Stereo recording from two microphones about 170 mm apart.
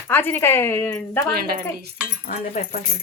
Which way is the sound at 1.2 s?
60° right (ahead or behind).